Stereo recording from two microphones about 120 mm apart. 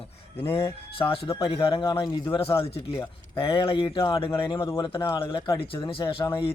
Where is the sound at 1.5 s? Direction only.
50° left (ahead or behind).